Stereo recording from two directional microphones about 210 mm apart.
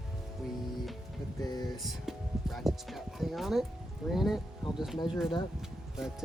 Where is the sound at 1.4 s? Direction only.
20° left (ahead or behind).